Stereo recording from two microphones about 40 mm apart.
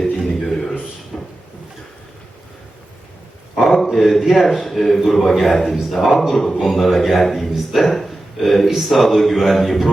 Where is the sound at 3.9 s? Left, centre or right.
Centre.